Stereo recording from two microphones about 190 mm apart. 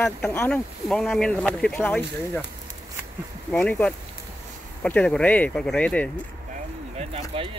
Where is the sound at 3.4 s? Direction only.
5° left (ahead or behind).